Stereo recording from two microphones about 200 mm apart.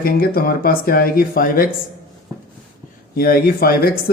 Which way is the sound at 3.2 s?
50° left (ahead or behind).